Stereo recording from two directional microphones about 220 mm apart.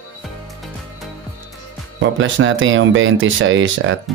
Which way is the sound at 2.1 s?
60° right (ahead or behind).